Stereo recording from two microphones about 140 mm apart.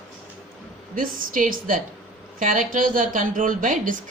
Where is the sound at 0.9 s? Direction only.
80° right.